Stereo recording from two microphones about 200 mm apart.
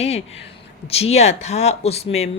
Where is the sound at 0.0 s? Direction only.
30° left (ahead or behind).